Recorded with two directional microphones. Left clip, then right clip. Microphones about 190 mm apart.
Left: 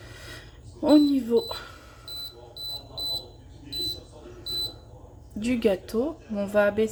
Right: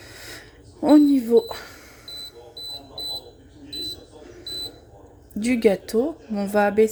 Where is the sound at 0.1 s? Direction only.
30° right (ahead or behind).